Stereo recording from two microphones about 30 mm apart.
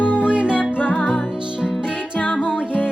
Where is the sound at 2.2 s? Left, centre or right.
Left.